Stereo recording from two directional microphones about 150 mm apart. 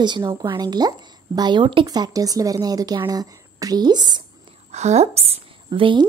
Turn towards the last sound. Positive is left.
turn(degrees=-30)  # may be behind; listen again after turning